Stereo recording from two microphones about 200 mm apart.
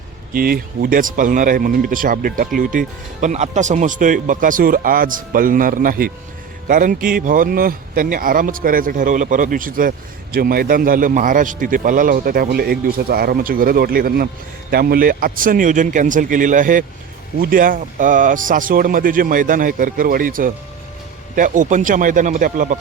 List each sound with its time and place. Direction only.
0.3 s speech: 50° right (ahead or behind)